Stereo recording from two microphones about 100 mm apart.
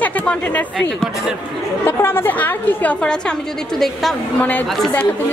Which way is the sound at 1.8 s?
20° left (ahead or behind).